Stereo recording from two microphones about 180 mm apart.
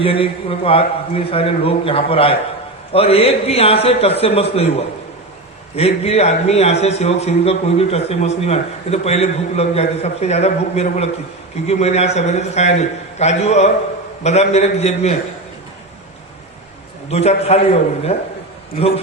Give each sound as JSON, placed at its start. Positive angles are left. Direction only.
{"t": 0.0, "sound": "a man's voice", "side_deg": 30}
{"t": 5.7, "sound": "a man's voice", "side_deg": 35}
{"t": 17.1, "sound": "a man's voice", "side_deg": 35}